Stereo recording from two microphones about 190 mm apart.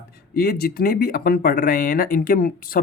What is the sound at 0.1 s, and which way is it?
Speech, 55° left (ahead or behind).